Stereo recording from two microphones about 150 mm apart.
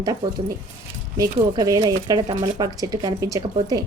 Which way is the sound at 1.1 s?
20° right (ahead or behind).